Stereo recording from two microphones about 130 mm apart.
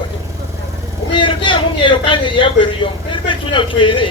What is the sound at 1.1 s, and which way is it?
Speech, 40° left (ahead or behind).